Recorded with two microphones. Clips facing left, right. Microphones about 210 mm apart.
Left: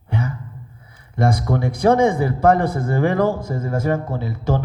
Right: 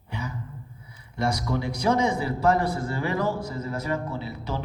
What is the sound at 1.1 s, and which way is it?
A man's voice, 55° left (ahead or behind).